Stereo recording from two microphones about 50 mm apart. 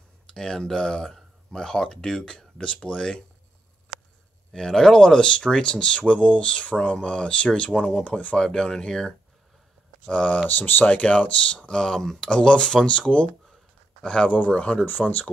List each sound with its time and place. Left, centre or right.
0.3 s speech: centre
4.5 s speech: centre
10.0 s speech: left
14.9 s speech: left